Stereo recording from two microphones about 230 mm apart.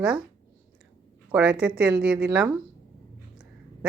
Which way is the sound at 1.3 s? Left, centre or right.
Centre.